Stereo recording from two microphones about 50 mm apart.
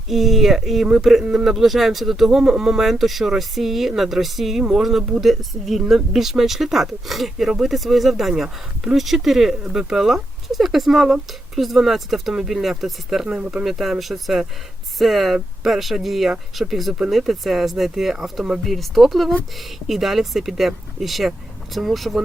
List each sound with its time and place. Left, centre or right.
0.1 s speech: centre
1.2 s speech: centre
1.5 s speech: centre
18.6 s speech: centre